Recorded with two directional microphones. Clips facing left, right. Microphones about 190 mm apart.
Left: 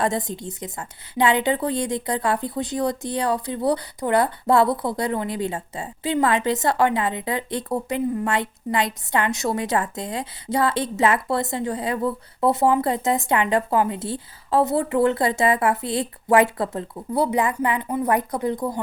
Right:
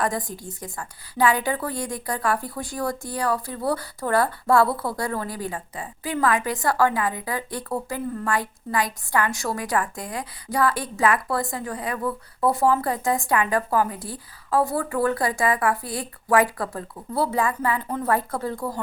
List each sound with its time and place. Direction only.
0.0 s a woman's voice: 25° left (ahead or behind)